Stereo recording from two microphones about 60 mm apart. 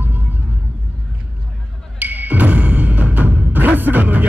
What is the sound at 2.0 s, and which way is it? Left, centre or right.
Music, right.